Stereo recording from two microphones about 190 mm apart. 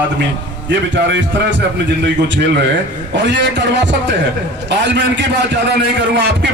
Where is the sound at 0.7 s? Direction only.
70° right (ahead or behind).